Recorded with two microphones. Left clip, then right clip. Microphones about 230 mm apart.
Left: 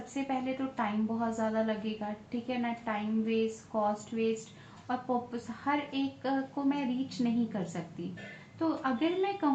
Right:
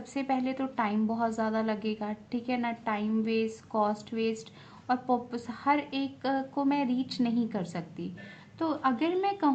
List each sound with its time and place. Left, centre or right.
0.1 s a woman's voice: right